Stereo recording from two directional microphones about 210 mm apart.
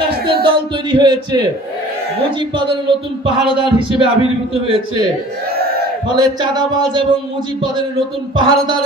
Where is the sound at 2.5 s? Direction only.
25° right (ahead or behind).